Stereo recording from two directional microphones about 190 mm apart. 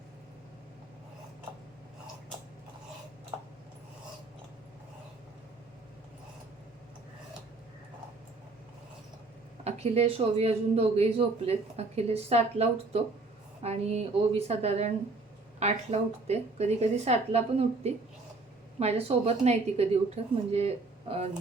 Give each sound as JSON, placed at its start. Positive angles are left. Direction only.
{"t": 9.6, "sound": "speech", "side_deg": -35}
{"t": 18.8, "sound": "speech", "side_deg": -35}